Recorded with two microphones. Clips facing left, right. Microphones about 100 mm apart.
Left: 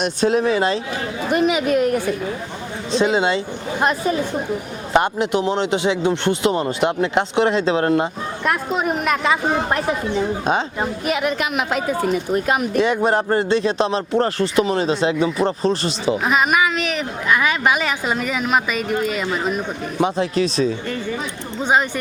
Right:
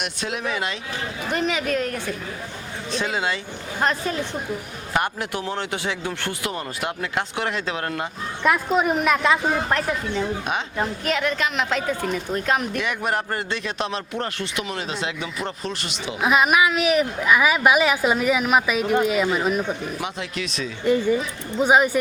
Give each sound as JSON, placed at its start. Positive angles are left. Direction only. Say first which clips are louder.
{"t": 0.0, "sound": "speech", "louder": "left 10 dB", "side_deg": 35}
{"t": 1.3, "sound": "a woman's voice", "louder": "left 6 dB", "side_deg": 10}
{"t": 2.9, "sound": "speech", "louder": "left 8 dB", "side_deg": 25}
{"t": 3.8, "sound": "a woman's voice", "louder": "left 4 dB", "side_deg": 10}
{"t": 4.9, "sound": "speech", "louder": "left 7 dB", "side_deg": 20}
{"t": 8.4, "sound": "a woman's voice", "louder": "right 1 dB", "side_deg": 0}
{"t": 9.5, "sound": "speech", "louder": "left 3 dB", "side_deg": 20}
{"t": 10.8, "sound": "a woman's voice", "louder": "left 2 dB", "side_deg": 10}
{"t": 12.7, "sound": "speech", "louder": "left 8 dB", "side_deg": 30}
{"t": 16.2, "sound": "a woman's voice", "louder": "right 2 dB", "side_deg": 0}
{"t": 20.0, "sound": "speech", "louder": "left 11 dB", "side_deg": 35}
{"t": 21.6, "sound": "speech", "louder": "right 1 dB", "side_deg": -10}